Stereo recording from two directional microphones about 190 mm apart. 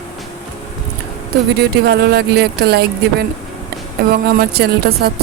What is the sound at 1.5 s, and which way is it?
Speech, 60° right (ahead or behind).